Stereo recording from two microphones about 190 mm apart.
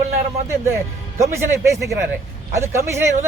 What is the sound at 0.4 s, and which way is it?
Speech, 15° right (ahead or behind).